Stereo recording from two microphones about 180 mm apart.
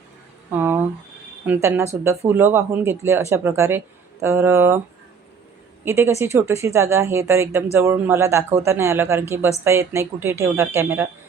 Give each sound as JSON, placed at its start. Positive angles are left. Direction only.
{"t": 0.5, "sound": "speech", "side_deg": -10}
{"t": 5.8, "sound": "speech", "side_deg": -15}